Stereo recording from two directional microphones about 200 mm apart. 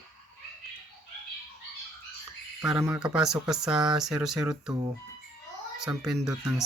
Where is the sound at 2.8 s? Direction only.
10° right (ahead or behind).